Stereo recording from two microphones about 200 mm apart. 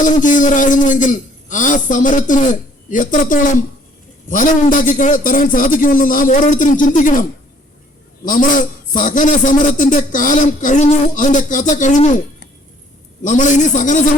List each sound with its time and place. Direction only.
0.0 s a man's voice: 40° left (ahead or behind)
13.2 s a man's voice: 40° left (ahead or behind)